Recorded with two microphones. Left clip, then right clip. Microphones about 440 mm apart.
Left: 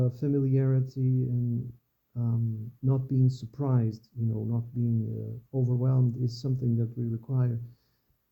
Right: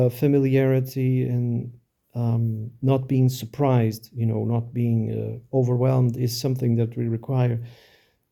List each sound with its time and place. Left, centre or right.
0.0 s speech: right